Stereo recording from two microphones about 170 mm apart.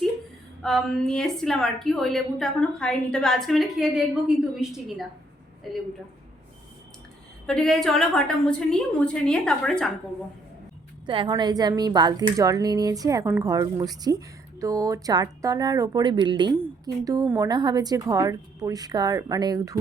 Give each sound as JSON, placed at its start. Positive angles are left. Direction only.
{"t": 0.6, "sound": "a woman's voice", "side_deg": 0}
{"t": 7.4, "sound": "a woman's voice", "side_deg": 5}
{"t": 11.0, "sound": "a woman's voice", "side_deg": -30}